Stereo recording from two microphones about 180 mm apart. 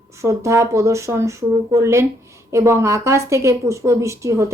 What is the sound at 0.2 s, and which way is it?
Speech, 15° right (ahead or behind).